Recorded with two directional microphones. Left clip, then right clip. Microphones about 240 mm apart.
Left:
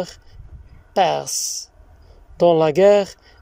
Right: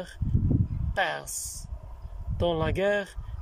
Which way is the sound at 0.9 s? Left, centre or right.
Left.